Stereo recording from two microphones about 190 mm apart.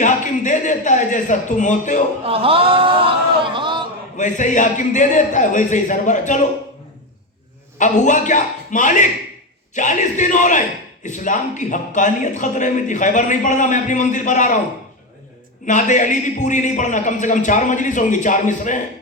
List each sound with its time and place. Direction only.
0.0 s a sound: 40° left (ahead or behind)
2.2 s a man's voice: 30° right (ahead or behind)
4.2 s a man's voice: 40° left (ahead or behind)
7.8 s a man's voice: 40° left (ahead or behind)
15.6 s a man's voice: 40° left (ahead or behind)